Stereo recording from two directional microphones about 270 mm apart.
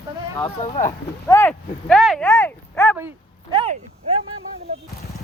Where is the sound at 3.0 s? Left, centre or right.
Centre.